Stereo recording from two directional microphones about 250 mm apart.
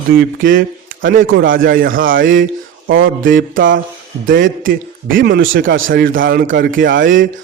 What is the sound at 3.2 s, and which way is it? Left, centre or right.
Speech, right.